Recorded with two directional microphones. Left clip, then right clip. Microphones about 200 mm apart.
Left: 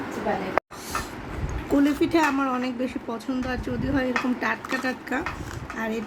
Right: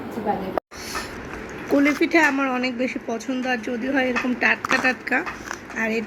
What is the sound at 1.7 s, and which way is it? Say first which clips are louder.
Speech: right 3 dB; 15° left (ahead or behind).